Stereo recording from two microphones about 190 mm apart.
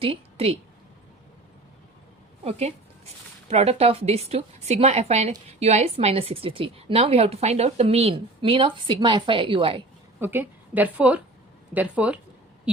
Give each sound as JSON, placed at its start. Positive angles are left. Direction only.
{"t": 0.0, "sound": "a woman's voice", "side_deg": -30}
{"t": 2.4, "sound": "a woman's voice", "side_deg": -35}
{"t": 10.2, "sound": "a woman's voice", "side_deg": -10}